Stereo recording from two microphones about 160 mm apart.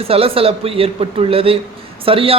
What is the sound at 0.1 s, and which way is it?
A man's voice, 35° right (ahead or behind).